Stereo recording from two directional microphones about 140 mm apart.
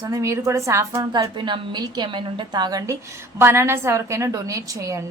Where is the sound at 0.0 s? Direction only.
25° right (ahead or behind).